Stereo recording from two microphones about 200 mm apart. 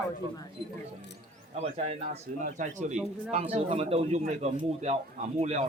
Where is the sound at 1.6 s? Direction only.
35° right (ahead or behind).